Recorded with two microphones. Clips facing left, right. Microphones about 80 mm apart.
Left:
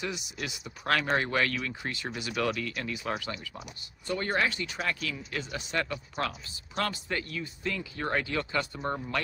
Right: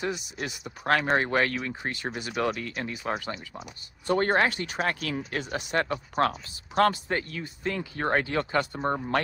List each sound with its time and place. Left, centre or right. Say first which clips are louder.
0.0 s speech: right 4 dB; right